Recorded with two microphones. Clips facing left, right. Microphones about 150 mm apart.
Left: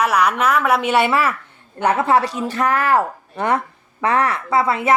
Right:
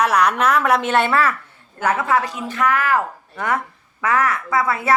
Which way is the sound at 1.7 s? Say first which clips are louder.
Left 3 dB; 30° left (ahead or behind).